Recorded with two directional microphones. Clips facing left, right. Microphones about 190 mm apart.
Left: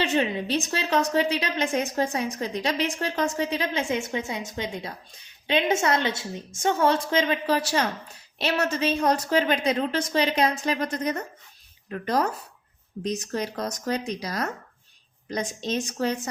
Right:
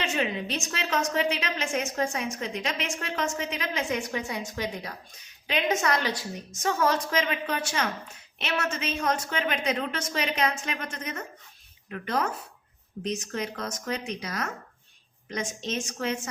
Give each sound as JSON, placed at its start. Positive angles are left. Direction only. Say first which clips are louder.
{"t": 0.0, "sound": "a woman's voice", "louder": "left 4 dB", "side_deg": 30}